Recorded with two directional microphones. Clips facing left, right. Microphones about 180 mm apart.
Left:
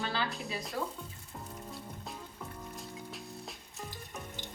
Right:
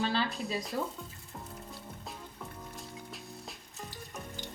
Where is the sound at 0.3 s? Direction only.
Centre (ahead or behind).